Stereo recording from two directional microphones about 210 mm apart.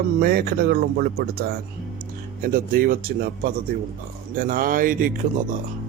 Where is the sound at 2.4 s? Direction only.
45° right (ahead or behind).